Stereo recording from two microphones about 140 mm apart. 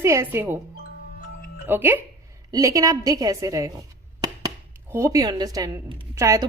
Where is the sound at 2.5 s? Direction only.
25° right (ahead or behind).